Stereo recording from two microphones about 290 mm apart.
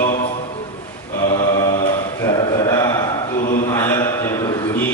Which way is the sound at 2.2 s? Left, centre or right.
Centre.